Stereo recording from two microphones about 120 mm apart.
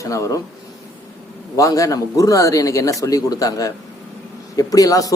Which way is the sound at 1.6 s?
25° left (ahead or behind).